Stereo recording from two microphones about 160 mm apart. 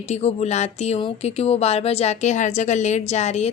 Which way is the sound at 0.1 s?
40° left (ahead or behind).